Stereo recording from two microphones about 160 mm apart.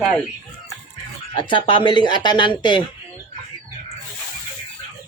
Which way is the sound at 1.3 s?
30° left (ahead or behind).